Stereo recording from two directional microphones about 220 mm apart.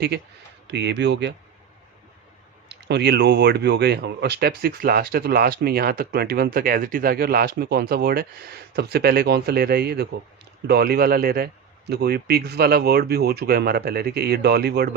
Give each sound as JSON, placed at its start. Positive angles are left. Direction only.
{"t": 0.1, "sound": "speech", "side_deg": -50}
{"t": 2.6, "sound": "speech", "side_deg": -50}